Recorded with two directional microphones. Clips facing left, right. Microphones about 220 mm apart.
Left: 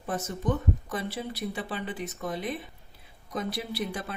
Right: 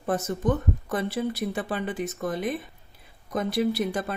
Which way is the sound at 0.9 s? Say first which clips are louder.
Right 6 dB; 50° right (ahead or behind).